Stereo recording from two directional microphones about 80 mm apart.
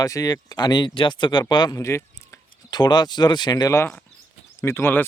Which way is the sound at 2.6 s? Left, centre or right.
Left.